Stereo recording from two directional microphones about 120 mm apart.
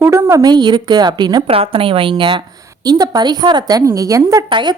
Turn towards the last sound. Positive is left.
turn(degrees=-40)  # may be behind; listen again after turning